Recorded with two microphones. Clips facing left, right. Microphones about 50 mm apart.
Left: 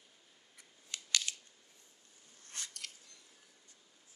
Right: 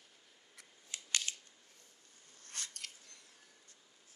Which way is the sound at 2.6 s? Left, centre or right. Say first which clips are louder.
Even; right.